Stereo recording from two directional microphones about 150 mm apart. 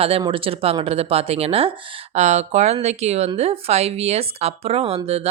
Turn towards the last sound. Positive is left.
turn(degrees=-40)  # may be behind; listen again after turning